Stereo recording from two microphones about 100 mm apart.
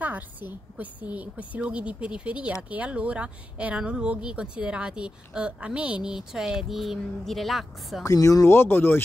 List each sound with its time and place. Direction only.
0.0 s a woman's voice: 15° right (ahead or behind); by 8.0 s centre (ahead or behind)
8.0 s speech: 35° left (ahead or behind)